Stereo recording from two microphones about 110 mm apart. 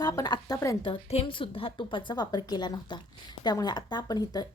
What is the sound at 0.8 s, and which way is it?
A woman's voice, 55° left (ahead or behind).